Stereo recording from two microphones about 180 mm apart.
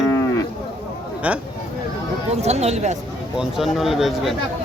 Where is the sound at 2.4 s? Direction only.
35° right (ahead or behind).